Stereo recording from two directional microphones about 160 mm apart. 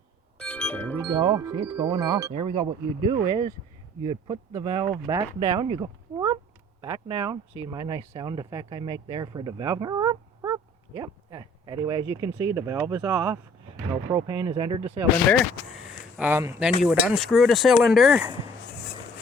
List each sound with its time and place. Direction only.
0.3 s music: 5° left (ahead or behind)
1.0 s speech: 25° right (ahead or behind)
2.3 s speech: 50° right (ahead or behind)
3.1 s speech: 30° right (ahead or behind)
15.3 s speech: centre (ahead or behind)